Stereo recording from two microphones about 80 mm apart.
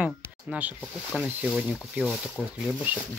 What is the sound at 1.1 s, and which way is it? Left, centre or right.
Speech, centre.